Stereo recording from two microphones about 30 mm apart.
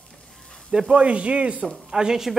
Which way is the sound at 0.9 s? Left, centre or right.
Right.